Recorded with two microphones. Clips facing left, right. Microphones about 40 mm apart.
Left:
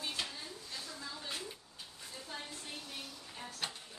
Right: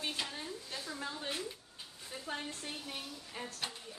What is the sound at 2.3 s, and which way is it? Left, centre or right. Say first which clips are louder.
Speech: right 5 dB; right.